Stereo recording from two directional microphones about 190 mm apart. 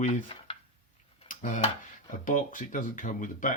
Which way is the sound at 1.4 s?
40° left (ahead or behind).